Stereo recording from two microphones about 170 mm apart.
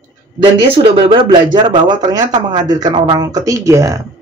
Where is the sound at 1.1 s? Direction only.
30° right (ahead or behind).